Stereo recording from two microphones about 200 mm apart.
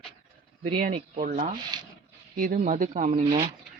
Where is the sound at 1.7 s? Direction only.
20° right (ahead or behind).